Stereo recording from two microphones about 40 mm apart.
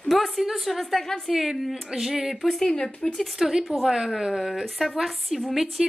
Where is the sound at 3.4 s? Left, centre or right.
Centre.